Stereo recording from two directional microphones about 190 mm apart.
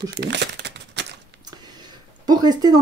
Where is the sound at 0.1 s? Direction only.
60° right (ahead or behind).